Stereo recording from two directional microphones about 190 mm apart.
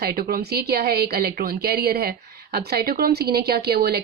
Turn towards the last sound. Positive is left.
turn(degrees=-55)  # may be behind; listen again after turning